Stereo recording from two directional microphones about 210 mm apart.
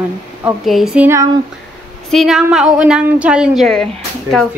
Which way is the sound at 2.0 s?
Centre (ahead or behind).